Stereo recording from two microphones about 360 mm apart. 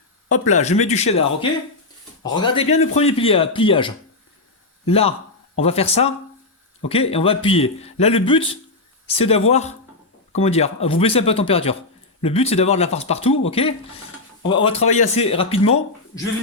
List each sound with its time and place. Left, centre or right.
0.4 s speech: centre
2.4 s a man's voice: centre